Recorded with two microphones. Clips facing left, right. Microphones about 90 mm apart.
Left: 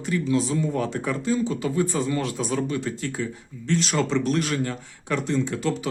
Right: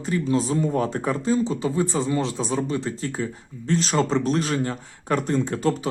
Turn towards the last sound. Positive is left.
turn(degrees=-40)  # may be behind; listen again after turning